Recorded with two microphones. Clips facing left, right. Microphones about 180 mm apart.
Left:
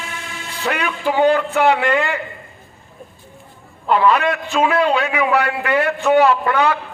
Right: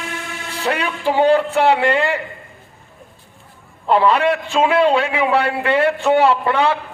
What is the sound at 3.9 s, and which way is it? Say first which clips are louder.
A man's voice: right 1 dB; 30° right (ahead or behind).